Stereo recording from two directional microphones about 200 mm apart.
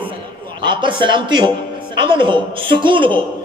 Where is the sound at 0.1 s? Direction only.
25° right (ahead or behind).